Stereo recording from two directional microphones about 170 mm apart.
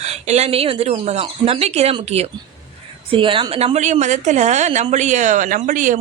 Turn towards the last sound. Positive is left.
turn(degrees=-45)  # may be behind; listen again after turning